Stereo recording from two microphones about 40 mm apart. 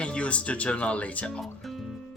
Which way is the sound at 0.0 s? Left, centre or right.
Left.